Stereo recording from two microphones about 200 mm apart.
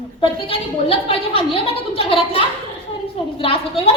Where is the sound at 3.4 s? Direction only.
25° left (ahead or behind).